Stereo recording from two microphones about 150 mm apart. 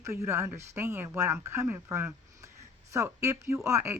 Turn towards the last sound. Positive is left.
turn(degrees=-20)  # may be behind; listen again after turning